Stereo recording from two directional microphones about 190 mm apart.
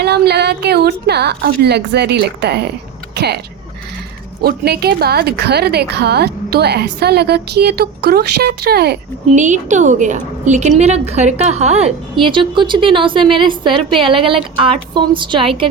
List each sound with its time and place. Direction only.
0.0 s a woman's voice: 60° right (ahead or behind)
4.4 s a woman's voice: 55° right (ahead or behind)
9.3 s a woman's voice: 40° right (ahead or behind)